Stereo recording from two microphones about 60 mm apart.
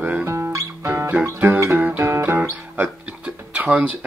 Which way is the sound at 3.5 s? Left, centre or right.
Right.